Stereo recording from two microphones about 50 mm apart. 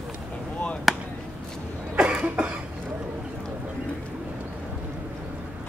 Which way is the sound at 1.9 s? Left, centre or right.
Centre.